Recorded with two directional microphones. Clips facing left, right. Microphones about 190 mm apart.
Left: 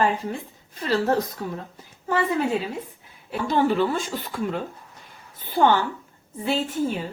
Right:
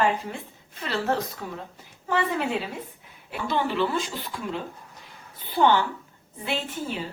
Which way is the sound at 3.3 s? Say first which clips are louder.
Left 5 dB; 45° left (ahead or behind).